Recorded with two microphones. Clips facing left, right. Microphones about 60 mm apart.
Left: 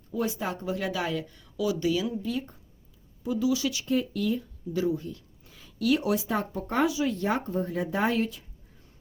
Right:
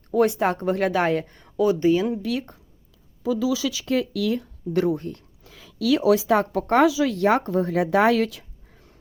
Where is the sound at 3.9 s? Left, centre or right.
Right.